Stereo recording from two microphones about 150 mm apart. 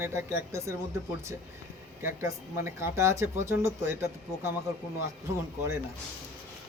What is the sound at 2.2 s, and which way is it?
Speech, 20° right (ahead or behind).